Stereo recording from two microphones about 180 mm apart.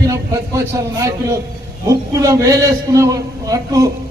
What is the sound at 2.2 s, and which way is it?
A man's voice, 20° right (ahead or behind).